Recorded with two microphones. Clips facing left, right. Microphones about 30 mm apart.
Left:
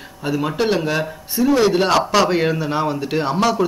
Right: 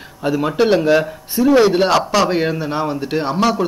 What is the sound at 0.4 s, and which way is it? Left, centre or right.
A man's voice, centre.